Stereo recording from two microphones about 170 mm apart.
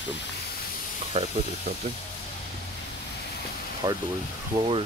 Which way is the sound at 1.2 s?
40° right (ahead or behind).